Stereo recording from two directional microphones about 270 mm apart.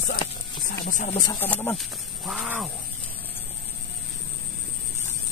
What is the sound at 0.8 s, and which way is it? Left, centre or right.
Speech, left.